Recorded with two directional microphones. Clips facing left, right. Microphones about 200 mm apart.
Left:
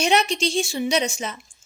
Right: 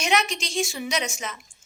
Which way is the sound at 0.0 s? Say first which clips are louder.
Left 5 dB; 30° left (ahead or behind).